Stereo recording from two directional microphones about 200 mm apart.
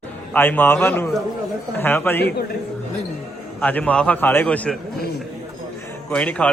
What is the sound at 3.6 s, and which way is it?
A man's voice, 5° left (ahead or behind).